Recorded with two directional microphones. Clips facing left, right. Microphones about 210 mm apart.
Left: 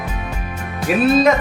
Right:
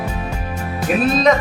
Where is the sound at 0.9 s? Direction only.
5° left (ahead or behind).